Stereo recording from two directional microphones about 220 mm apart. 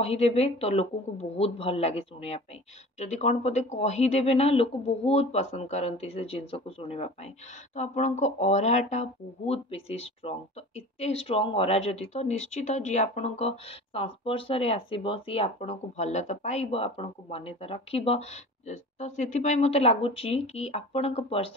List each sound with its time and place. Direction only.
0.0 s speech: 25° left (ahead or behind)